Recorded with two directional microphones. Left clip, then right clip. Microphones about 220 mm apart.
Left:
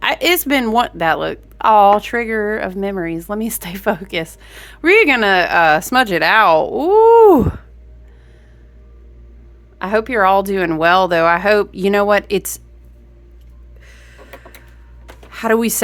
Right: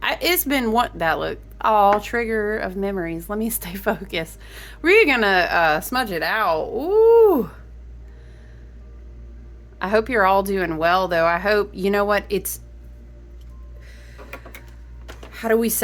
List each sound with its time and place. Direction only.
0.0 s a woman's voice: 30° left (ahead or behind)
9.7 s a woman's voice: 20° left (ahead or behind)
13.8 s a sound: 35° left (ahead or behind)
15.3 s speech: 40° left (ahead or behind)